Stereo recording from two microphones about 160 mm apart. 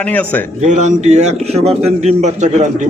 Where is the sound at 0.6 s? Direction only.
50° right (ahead or behind).